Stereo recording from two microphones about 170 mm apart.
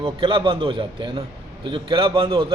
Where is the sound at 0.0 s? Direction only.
30° right (ahead or behind).